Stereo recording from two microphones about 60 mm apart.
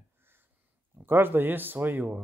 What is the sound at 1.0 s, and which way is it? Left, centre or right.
Speech, right.